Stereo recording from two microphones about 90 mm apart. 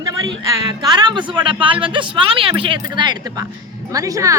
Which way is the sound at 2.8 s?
55° right (ahead or behind).